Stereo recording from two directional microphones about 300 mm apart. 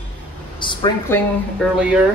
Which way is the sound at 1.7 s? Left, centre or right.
Centre.